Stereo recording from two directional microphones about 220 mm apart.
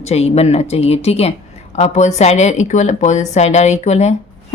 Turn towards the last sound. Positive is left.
turn(degrees=30)  # may be behind; listen again after turning